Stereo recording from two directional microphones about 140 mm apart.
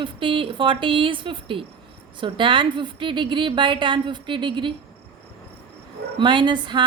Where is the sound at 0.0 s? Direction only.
40° right (ahead or behind).